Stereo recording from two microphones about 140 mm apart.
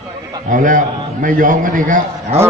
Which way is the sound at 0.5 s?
70° right (ahead or behind).